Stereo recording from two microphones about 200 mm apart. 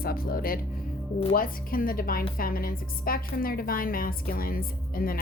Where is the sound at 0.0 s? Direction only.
50° left (ahead or behind).